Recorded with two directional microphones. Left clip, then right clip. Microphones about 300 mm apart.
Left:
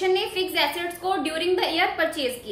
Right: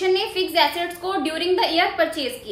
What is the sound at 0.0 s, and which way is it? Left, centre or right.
A woman's voice, centre.